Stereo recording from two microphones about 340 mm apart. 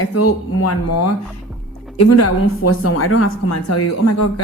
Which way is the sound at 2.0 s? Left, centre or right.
Left.